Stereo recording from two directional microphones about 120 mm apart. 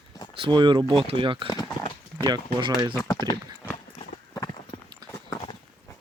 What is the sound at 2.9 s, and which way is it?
Speech, 25° left (ahead or behind).